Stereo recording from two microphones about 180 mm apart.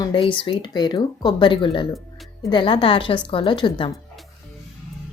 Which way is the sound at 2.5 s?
30° left (ahead or behind).